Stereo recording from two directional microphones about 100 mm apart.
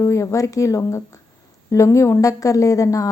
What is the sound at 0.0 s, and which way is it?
A woman's voice, 30° left (ahead or behind).